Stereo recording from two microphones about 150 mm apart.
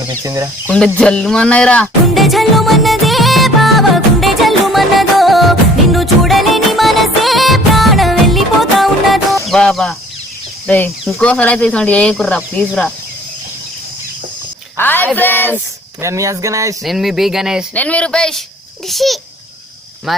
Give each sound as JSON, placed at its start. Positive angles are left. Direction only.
{"t": 0.1, "sound": "speech", "side_deg": -20}
{"t": 0.9, "sound": "music", "side_deg": 5}
{"t": 9.5, "sound": "speech", "side_deg": 0}
{"t": 14.8, "sound": "speech", "side_deg": 15}
{"t": 16.0, "sound": "speech", "side_deg": -20}
{"t": 16.8, "sound": "speech", "side_deg": 0}
{"t": 17.7, "sound": "speech", "side_deg": 10}